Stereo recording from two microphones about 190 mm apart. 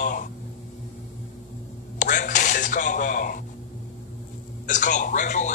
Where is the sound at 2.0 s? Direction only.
40° left (ahead or behind).